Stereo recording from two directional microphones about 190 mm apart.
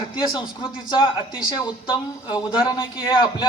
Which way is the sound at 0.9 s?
25° left (ahead or behind).